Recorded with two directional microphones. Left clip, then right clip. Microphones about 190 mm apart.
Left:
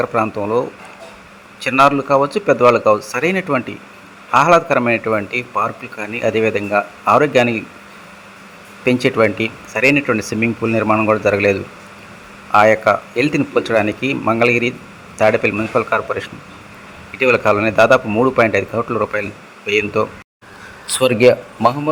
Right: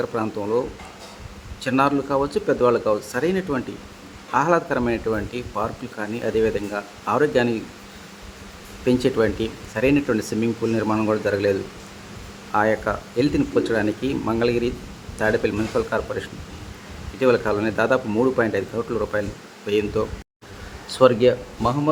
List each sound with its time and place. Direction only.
0.0 s a man's voice: 15° left (ahead or behind)
1.6 s a man's voice: 15° left (ahead or behind)
8.8 s a man's voice: 10° left (ahead or behind)
20.8 s speech: 30° left (ahead or behind)